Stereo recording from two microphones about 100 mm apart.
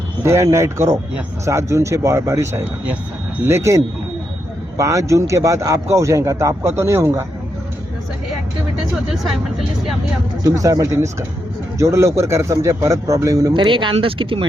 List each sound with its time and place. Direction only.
0.2 s a man's voice: 30° right (ahead or behind)
10.4 s a man's voice: 35° right (ahead or behind)
13.5 s speech: 55° right (ahead or behind)